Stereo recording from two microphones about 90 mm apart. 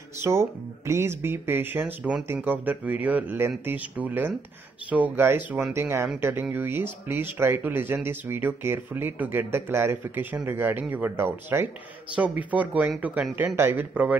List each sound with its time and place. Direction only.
0.2 s speech: 30° right (ahead or behind)